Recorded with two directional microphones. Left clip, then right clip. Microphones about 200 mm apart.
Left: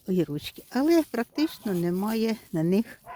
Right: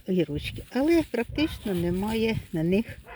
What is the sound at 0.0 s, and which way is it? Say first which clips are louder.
Speech: right 1 dB; 20° left (ahead or behind).